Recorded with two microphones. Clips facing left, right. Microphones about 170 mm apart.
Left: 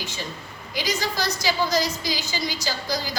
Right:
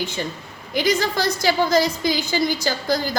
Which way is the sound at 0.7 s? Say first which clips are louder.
Right 7 dB; 55° right (ahead or behind).